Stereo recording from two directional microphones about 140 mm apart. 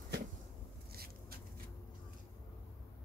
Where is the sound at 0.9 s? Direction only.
90° right.